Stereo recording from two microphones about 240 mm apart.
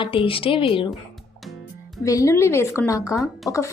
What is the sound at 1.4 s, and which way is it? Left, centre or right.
Music, centre.